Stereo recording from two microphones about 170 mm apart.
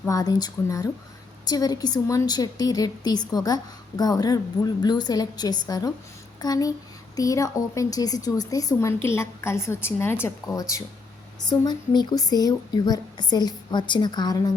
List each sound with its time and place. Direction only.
0.0 s a woman's voice: 20° left (ahead or behind)